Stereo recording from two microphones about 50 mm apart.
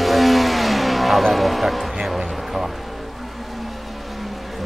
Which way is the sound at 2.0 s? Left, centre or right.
Centre.